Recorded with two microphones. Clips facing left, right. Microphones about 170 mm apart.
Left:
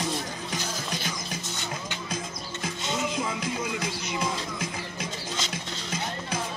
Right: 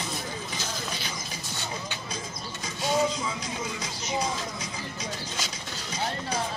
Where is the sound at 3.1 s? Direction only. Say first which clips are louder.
Left 3 dB; 55° left (ahead or behind).